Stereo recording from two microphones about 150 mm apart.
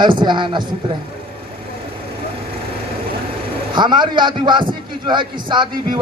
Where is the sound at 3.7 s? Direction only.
30° right (ahead or behind).